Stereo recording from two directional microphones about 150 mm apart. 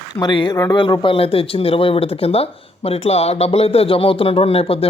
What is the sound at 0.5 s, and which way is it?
Speech, 20° left (ahead or behind).